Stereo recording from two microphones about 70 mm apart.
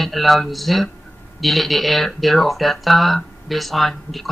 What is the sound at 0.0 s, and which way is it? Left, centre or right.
Speech, centre.